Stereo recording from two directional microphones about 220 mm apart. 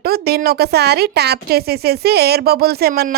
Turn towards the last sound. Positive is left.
turn(degrees=-45)  # may be behind; listen again after turning